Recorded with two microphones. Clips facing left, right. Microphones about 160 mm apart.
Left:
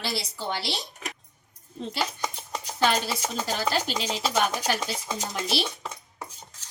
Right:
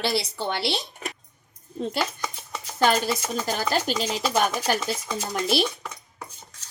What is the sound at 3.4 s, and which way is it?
A woman's voice, 45° right (ahead or behind).